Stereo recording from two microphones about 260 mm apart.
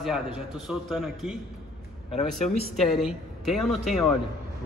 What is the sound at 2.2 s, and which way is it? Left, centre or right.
Speech, left.